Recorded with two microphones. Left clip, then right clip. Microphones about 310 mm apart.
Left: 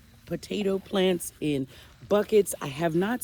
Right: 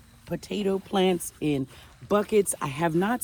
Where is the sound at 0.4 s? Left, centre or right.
Centre.